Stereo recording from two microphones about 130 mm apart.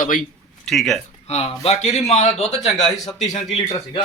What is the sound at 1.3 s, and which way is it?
A man's voice, 55° left (ahead or behind).